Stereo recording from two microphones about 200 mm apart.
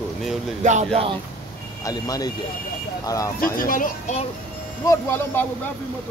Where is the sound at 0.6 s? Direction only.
30° right (ahead or behind).